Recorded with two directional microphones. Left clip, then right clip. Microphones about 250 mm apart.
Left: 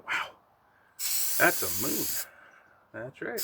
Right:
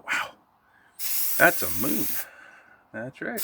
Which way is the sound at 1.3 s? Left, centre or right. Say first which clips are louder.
Right 5 dB; right.